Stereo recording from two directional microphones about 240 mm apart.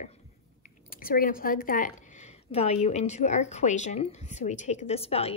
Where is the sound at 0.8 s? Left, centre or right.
Left.